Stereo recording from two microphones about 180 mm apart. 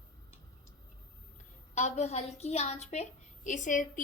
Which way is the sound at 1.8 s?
40° left (ahead or behind).